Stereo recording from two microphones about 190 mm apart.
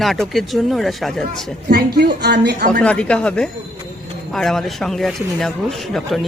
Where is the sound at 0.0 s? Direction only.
Centre (ahead or behind).